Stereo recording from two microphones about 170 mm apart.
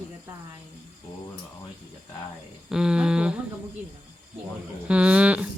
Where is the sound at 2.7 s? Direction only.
5° right (ahead or behind).